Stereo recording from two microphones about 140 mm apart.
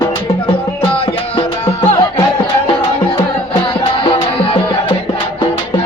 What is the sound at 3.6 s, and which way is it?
Music, 35° left (ahead or behind).